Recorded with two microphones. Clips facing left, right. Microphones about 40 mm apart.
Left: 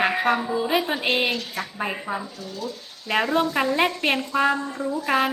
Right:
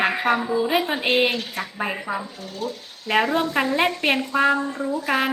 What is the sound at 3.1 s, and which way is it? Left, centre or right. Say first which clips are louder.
A woman's voice: right 1 dB; centre.